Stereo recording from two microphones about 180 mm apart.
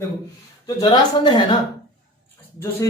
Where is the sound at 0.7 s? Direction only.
25° left (ahead or behind).